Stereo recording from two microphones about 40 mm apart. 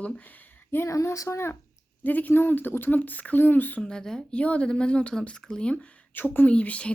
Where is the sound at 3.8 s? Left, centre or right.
Centre.